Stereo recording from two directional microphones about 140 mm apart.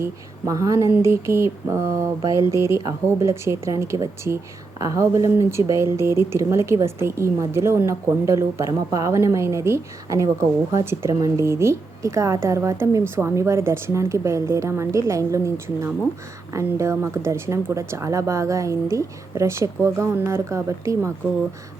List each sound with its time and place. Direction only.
0.0 s speech: 25° right (ahead or behind)